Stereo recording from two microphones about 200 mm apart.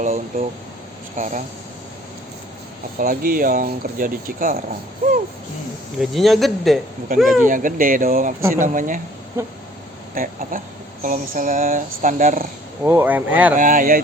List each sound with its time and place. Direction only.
0.0 s speech: 45° right (ahead or behind)
3.0 s speech: 45° right (ahead or behind)
6.0 s speech: centre (ahead or behind)
7.1 s speech: 45° right (ahead or behind)
9.4 s speech: 15° right (ahead or behind)
10.2 s speech: 45° right (ahead or behind)
12.8 s speech: 10° right (ahead or behind)
13.6 s speech: 40° right (ahead or behind)